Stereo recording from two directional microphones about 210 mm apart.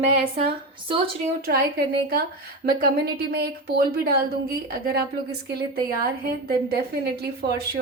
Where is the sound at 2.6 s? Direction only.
50° right (ahead or behind).